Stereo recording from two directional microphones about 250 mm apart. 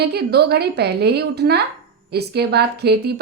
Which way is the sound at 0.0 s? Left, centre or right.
Right.